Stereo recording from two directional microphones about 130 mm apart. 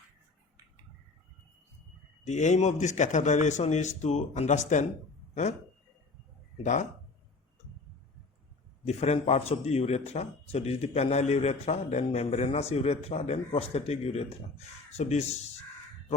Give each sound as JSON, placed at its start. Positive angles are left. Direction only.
{"t": 2.2, "sound": "a man's voice", "side_deg": 65}
{"t": 6.6, "sound": "speech", "side_deg": 65}
{"t": 8.8, "sound": "a man's voice", "side_deg": 55}